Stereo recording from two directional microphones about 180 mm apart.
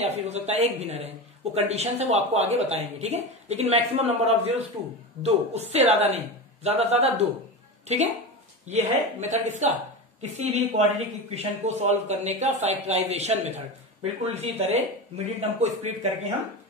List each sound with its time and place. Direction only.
0.0 s speech: 35° right (ahead or behind)
8.6 s speech: 40° right (ahead or behind)